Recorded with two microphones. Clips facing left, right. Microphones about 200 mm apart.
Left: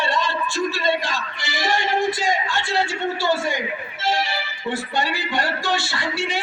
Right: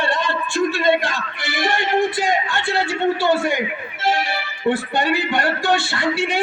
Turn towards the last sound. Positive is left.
turn(degrees=-55)  # may be behind; listen again after turning